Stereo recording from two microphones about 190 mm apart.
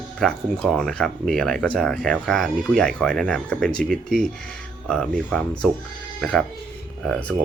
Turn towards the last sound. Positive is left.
turn(degrees=5)  # may be behind; listen again after turning